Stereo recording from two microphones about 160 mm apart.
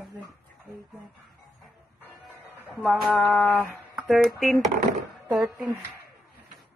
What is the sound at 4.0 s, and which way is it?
Speech, centre (ahead or behind).